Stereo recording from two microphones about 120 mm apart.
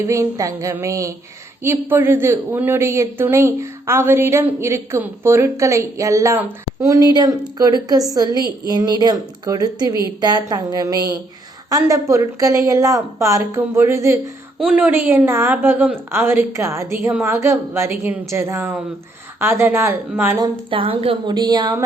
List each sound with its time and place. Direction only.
0.0 s a woman's voice: 25° right (ahead or behind)
14.6 s a woman's voice: 10° right (ahead or behind)
20.7 s a woman's voice: 45° right (ahead or behind); by 21.8 s 30° right (ahead or behind)